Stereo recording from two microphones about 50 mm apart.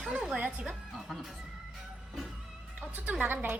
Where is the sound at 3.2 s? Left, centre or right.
Right.